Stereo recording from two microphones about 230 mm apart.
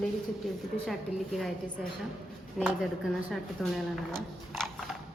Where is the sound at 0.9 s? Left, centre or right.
Centre.